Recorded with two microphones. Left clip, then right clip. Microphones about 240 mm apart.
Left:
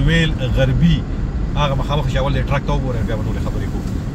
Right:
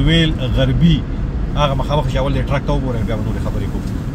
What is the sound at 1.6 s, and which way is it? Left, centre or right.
Speech, centre.